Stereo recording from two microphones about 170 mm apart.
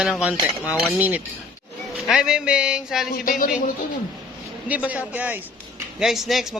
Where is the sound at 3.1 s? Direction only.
55° left (ahead or behind).